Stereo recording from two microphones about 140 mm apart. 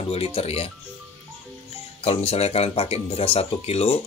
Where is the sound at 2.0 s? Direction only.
45° left (ahead or behind).